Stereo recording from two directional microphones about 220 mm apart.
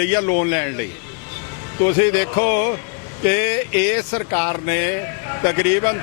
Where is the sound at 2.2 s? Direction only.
15° left (ahead or behind).